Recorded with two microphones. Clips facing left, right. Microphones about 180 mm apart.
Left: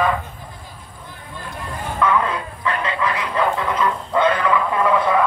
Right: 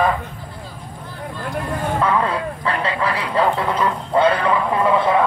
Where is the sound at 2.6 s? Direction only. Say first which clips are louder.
Left 1 dB; 35° right (ahead or behind).